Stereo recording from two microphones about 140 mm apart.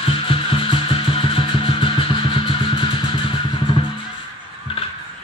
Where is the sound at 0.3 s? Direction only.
40° left (ahead or behind).